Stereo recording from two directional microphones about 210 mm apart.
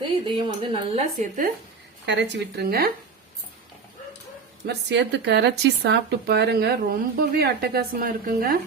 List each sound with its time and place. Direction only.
0.3 s speech: 25° right (ahead or behind)
2.0 s speech: 55° right (ahead or behind)
4.6 s speech: 55° right (ahead or behind)